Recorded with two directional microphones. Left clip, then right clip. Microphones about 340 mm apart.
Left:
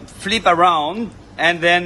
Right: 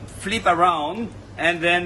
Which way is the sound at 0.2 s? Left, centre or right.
Left.